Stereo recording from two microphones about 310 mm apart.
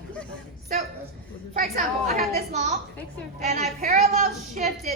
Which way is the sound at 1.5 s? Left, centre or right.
Right.